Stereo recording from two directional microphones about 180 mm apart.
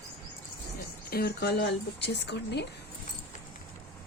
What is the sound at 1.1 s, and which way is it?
A woman's voice, 60° left (ahead or behind).